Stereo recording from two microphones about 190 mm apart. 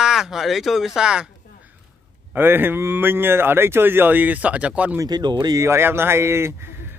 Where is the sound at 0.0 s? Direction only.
5° right (ahead or behind).